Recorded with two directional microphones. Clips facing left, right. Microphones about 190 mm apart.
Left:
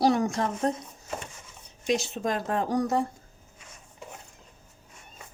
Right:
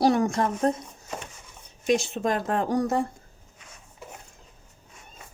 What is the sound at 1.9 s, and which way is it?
Speech, 55° right (ahead or behind).